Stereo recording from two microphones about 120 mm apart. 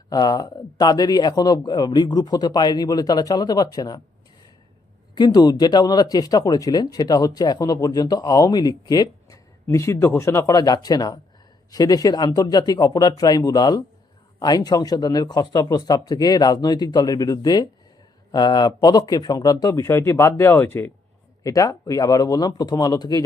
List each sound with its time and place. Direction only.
0.1 s speech: 30° left (ahead or behind)
5.1 s a man's voice: 35° left (ahead or behind)